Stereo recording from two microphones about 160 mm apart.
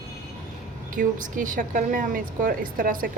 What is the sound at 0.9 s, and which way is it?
A woman's voice, 55° right (ahead or behind).